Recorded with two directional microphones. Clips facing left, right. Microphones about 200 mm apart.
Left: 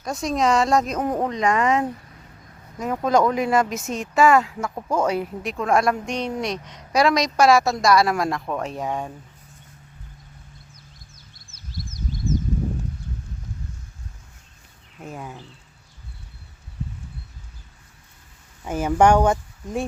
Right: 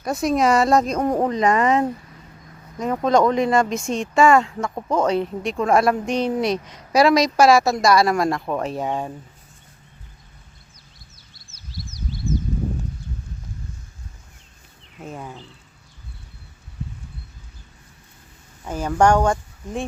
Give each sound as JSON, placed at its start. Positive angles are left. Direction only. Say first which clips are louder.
{"t": 0.0, "sound": "speech", "louder": "right 3 dB", "side_deg": -5}
{"t": 11.7, "sound": "a sound", "louder": "left 1 dB", "side_deg": 50}
{"t": 15.0, "sound": "speech", "louder": "right 1 dB", "side_deg": 0}
{"t": 18.6, "sound": "speech", "louder": "left 1 dB", "side_deg": 10}